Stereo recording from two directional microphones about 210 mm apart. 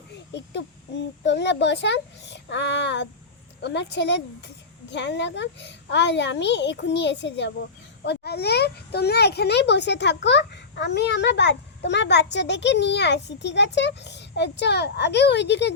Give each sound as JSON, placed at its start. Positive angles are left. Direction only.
{"t": 0.1, "sound": "a child's voice", "side_deg": 55}